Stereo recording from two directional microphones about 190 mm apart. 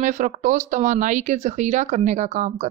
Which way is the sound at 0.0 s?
40° right (ahead or behind).